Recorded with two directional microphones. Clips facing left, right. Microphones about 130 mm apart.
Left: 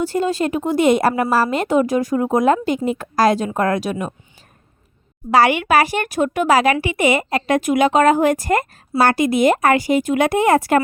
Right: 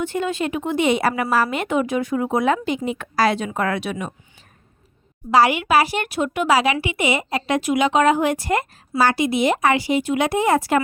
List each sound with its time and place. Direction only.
0.0 s a woman's voice: 35° left (ahead or behind)
5.3 s a woman's voice: 60° left (ahead or behind)